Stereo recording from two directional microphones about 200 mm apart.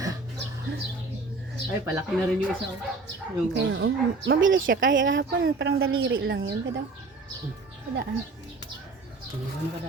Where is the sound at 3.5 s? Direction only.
60° right (ahead or behind).